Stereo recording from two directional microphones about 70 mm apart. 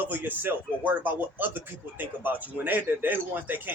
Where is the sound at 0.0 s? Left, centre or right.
Right.